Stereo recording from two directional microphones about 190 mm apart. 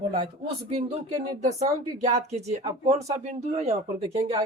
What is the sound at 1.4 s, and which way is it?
Speech, 35° right (ahead or behind).